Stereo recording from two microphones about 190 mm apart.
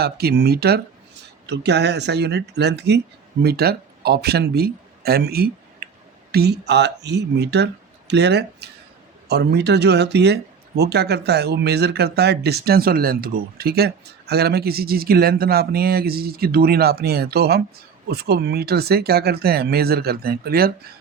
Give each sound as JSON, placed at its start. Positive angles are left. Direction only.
{"t": 0.0, "sound": "speech", "side_deg": -55}